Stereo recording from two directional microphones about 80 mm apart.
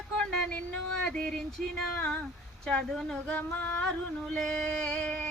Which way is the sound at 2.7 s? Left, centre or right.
Centre.